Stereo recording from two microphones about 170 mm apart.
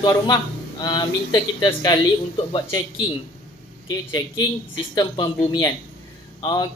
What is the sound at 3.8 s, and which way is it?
A man's voice, 25° left (ahead or behind).